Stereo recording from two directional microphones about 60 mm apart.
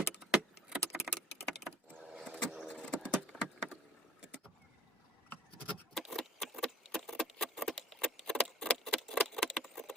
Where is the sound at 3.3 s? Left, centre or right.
Centre.